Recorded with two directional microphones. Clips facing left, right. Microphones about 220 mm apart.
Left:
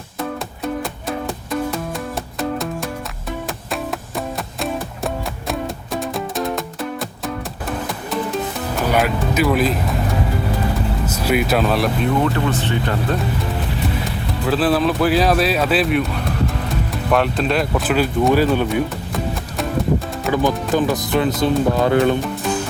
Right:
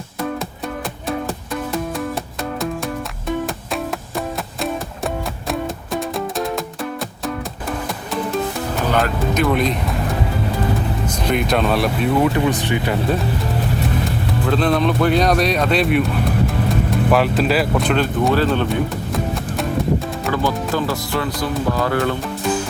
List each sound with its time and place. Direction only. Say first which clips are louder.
5.5 s music: right 1 dB; centre (ahead or behind)
8.1 s music: right 1 dB; centre (ahead or behind)
11.0 s speech: left 3 dB; 5° left (ahead or behind)
12.4 s speech: right 2 dB; 15° right (ahead or behind)
14.4 s speech: left 1 dB; 5° left (ahead or behind)
17.1 s speech: even; centre (ahead or behind)
18.7 s music: even; centre (ahead or behind)
20.3 s music: left 3 dB; 15° left (ahead or behind)